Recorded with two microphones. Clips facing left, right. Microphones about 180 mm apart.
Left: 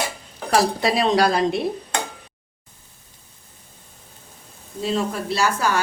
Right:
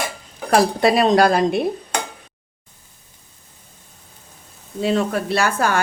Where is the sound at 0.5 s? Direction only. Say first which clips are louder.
Right 4 dB; 50° right (ahead or behind).